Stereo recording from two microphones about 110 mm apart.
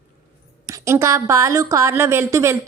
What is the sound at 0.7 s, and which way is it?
A woman's voice, 25° right (ahead or behind).